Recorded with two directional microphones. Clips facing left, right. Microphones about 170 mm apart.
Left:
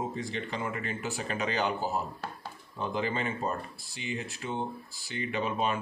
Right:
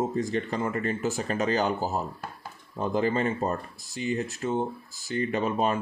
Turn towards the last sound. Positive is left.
turn(degrees=-45)  # may be behind; listen again after turning